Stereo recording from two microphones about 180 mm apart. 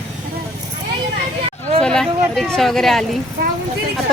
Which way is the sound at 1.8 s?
5° left (ahead or behind).